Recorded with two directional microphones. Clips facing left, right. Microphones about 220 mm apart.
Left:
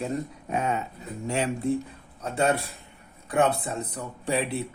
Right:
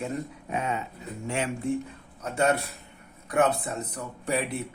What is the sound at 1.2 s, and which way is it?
Music, 35° left (ahead or behind).